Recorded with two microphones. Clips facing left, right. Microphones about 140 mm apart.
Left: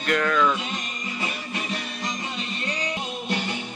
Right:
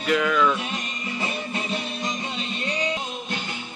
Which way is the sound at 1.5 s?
25° right (ahead or behind).